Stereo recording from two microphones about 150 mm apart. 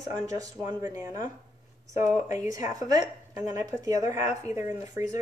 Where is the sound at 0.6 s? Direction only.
20° right (ahead or behind).